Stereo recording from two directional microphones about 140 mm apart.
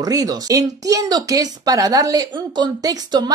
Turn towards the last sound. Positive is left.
turn(degrees=-25)  # may be behind; listen again after turning